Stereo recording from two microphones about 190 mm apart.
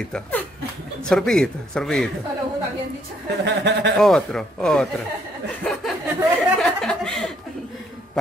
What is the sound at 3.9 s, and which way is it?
Speech, 5° left (ahead or behind).